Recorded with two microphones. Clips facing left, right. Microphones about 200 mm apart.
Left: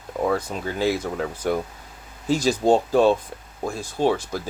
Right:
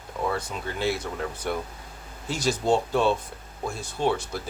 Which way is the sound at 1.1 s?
50° left (ahead or behind).